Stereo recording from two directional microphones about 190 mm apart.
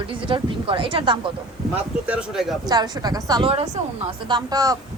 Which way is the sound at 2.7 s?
20° right (ahead or behind).